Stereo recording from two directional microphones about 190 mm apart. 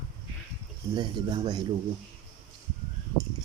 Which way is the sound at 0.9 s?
20° right (ahead or behind).